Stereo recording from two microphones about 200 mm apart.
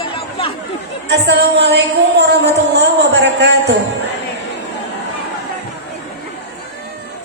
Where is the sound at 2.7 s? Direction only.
60° right (ahead or behind).